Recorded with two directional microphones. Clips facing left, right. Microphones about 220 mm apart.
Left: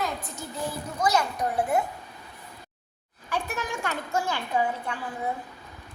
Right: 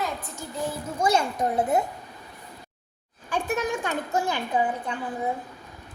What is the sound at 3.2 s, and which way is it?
A woman's voice, 20° right (ahead or behind).